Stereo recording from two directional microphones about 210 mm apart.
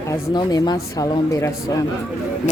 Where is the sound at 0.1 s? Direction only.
20° left (ahead or behind).